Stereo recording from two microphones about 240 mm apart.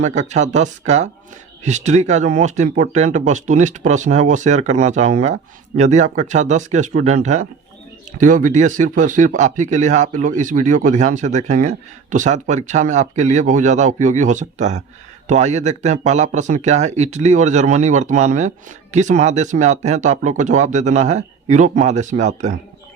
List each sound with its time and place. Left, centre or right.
0.0 s speech: right